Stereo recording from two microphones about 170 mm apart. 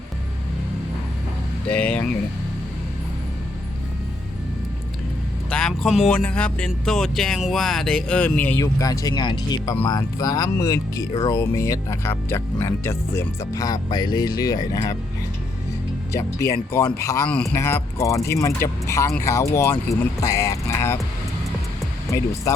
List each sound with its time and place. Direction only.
1.6 s speech: 10° left (ahead or behind)
5.5 s speech: 5° left (ahead or behind); by 14.9 s 20° left (ahead or behind)
16.1 s speech: 15° left (ahead or behind)
17.2 s speech: 5° left (ahead or behind)